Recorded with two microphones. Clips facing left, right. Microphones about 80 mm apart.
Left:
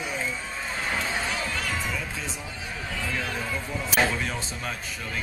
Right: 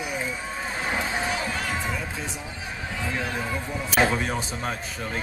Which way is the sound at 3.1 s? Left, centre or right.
Right.